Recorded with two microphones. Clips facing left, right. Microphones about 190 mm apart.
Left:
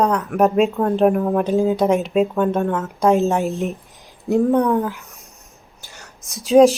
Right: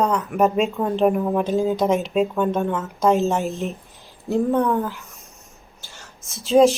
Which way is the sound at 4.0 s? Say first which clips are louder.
Left 4 dB; 15° left (ahead or behind).